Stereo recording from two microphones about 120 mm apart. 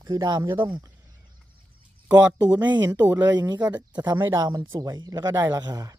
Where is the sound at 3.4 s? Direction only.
35° right (ahead or behind).